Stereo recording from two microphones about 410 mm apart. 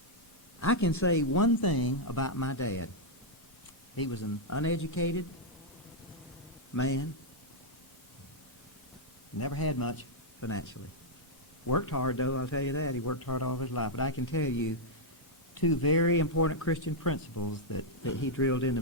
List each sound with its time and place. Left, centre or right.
0.6 s a man's voice: left
3.9 s speech: left
4.2 s a man's voice: left
6.7 s a man's voice: left
9.4 s a man's voice: left
15.5 s a man's voice: left